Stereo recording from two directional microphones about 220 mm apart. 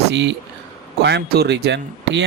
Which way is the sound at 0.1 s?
50° right (ahead or behind).